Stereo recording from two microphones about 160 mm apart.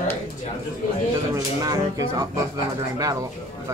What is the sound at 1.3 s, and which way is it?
Speech, 20° right (ahead or behind).